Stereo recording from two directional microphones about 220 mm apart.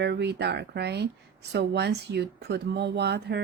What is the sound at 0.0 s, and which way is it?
Speech, 50° right (ahead or behind).